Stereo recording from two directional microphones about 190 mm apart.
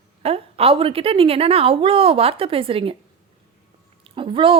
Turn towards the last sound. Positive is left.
turn(degrees=-25)  # may be behind; listen again after turning